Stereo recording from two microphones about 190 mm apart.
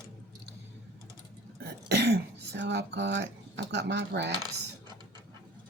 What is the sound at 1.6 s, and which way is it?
Throat clearing, 60° right (ahead or behind).